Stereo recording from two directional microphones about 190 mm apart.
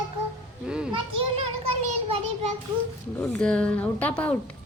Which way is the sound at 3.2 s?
5° left (ahead or behind).